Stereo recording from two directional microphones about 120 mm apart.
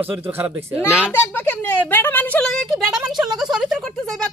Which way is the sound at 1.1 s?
15° left (ahead or behind).